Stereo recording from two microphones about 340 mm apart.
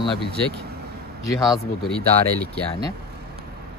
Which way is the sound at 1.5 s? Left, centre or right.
Centre.